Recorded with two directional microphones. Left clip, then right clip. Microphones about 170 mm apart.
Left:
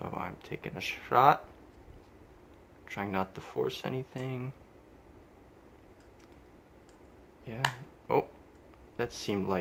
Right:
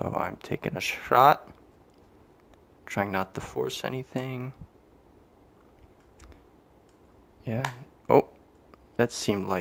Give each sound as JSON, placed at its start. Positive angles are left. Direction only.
{"t": 0.0, "sound": "speech", "side_deg": -65}
{"t": 2.8, "sound": "speech", "side_deg": -65}
{"t": 7.5, "sound": "speech", "side_deg": -65}